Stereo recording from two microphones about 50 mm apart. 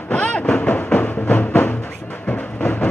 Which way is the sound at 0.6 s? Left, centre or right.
Left.